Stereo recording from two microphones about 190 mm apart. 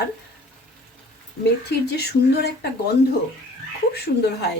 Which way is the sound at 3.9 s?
60° left (ahead or behind).